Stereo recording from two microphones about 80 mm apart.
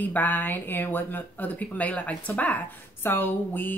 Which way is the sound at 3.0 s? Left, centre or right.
Left.